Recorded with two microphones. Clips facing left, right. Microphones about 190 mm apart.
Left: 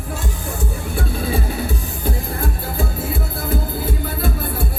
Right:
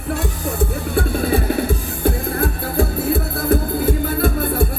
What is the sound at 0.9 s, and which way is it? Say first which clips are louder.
Music: right 4 dB; 60° right (ahead or behind).